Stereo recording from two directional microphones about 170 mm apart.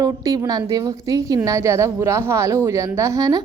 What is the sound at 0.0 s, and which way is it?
A woman's voice, 20° right (ahead or behind).